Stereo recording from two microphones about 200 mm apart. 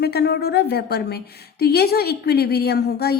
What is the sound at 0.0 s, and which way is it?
A woman's voice, 55° left (ahead or behind).